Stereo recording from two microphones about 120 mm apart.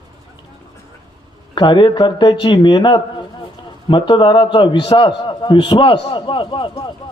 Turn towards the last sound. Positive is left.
turn(degrees=40)  # may be behind; listen again after turning